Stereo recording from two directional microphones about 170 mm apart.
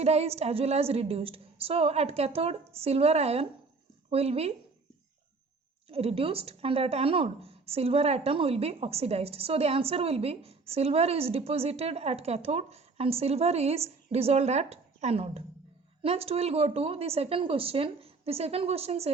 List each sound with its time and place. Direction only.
0.0 s speech: 40° right (ahead or behind)
5.9 s speech: 35° right (ahead or behind)